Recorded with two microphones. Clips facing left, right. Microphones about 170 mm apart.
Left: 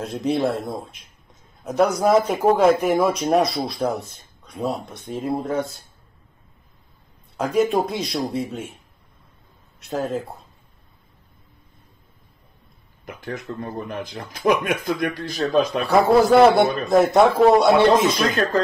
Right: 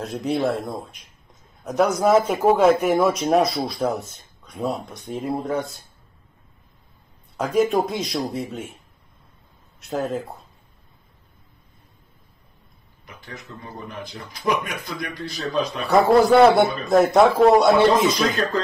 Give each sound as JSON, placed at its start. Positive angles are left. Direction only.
{"t": 0.0, "sound": "speech", "side_deg": 0}
{"t": 7.3, "sound": "speech", "side_deg": 0}
{"t": 9.8, "sound": "speech", "side_deg": 0}
{"t": 13.0, "sound": "speech", "side_deg": 50}
{"t": 15.9, "sound": "speech", "side_deg": 0}